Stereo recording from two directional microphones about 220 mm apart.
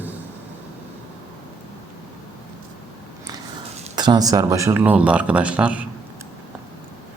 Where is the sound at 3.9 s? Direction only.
20° right (ahead or behind).